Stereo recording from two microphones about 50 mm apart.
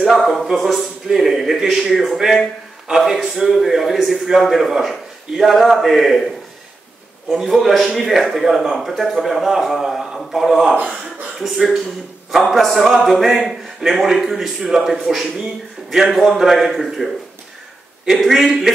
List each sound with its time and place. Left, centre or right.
0.1 s a man's voice: centre
7.3 s a man's voice: centre